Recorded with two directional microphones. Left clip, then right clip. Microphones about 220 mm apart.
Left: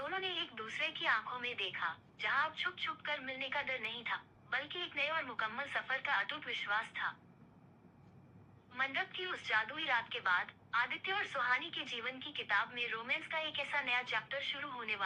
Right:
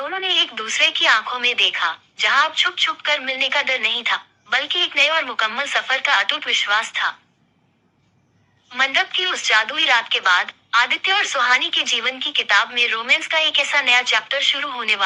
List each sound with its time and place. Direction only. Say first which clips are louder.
0.0 s a woman's voice: right 19 dB; 50° right (ahead or behind)
8.7 s a woman's voice: right 19 dB; 50° right (ahead or behind)